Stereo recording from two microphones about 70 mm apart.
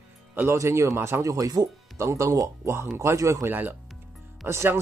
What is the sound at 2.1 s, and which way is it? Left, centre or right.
Speech, right.